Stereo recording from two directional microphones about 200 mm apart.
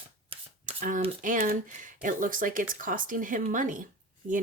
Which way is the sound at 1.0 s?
40° right (ahead or behind).